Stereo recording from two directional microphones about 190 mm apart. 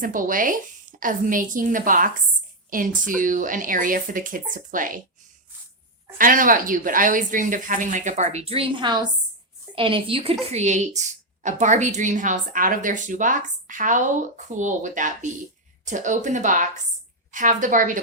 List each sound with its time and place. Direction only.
0.0 s speech: 45° right (ahead or behind)
6.1 s a woman's voice: 45° right (ahead or behind)